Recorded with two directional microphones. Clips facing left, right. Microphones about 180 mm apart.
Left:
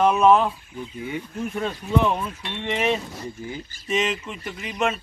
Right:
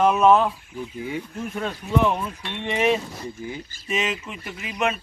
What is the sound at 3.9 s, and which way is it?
Speech, centre (ahead or behind).